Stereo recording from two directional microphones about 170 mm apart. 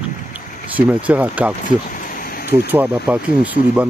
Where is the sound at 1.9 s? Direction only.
55° left (ahead or behind).